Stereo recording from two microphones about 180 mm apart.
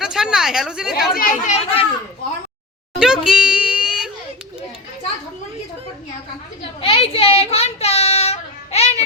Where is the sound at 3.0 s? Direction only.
5° right (ahead or behind).